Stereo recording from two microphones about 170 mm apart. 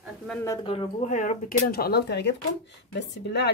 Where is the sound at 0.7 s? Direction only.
40° left (ahead or behind).